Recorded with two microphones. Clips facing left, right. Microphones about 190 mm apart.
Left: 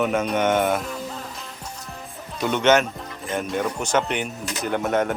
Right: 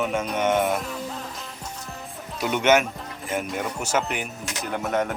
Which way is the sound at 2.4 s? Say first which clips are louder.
Left 1 dB; 10° right (ahead or behind).